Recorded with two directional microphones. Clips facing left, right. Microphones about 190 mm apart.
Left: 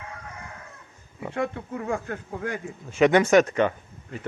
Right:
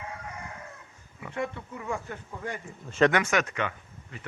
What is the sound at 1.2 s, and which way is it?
Speech, 35° left (ahead or behind).